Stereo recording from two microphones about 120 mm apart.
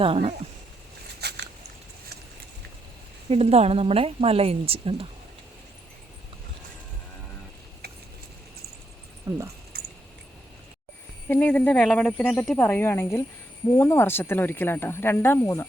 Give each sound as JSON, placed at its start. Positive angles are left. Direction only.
{"t": 0.0, "sound": "speech", "side_deg": -50}
{"t": 3.2, "sound": "speech", "side_deg": -55}
{"t": 9.3, "sound": "speech", "side_deg": -30}
{"t": 11.3, "sound": "speech", "side_deg": 15}